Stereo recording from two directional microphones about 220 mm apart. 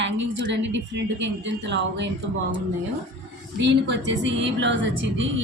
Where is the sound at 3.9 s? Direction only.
55° right (ahead or behind).